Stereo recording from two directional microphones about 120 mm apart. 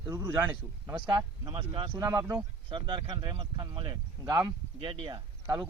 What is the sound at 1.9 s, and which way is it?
Speech, 30° right (ahead or behind).